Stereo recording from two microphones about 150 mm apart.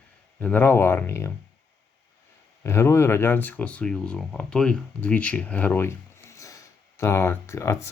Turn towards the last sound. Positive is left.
turn(degrees=20)  # may be behind; listen again after turning